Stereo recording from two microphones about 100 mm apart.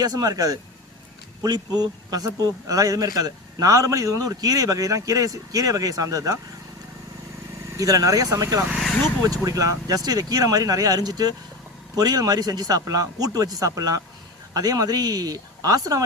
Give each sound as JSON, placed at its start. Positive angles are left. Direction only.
{"t": 0.0, "sound": "speech", "side_deg": -40}
{"t": 7.8, "sound": "speech", "side_deg": -35}